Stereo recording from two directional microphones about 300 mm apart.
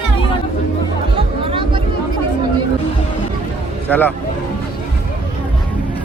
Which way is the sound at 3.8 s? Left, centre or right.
Centre.